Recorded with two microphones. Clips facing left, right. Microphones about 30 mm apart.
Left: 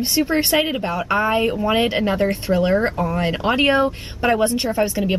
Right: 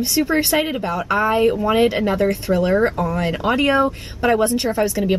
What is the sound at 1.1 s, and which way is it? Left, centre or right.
Speech, centre.